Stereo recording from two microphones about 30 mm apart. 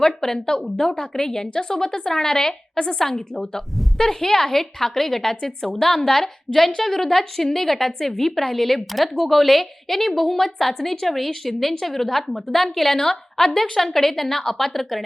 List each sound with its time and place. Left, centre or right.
0.0 s speech: centre
0.3 s a woman's voice: left; by 15.0 s centre